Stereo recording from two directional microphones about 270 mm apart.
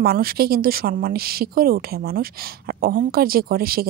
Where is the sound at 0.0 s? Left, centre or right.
Right.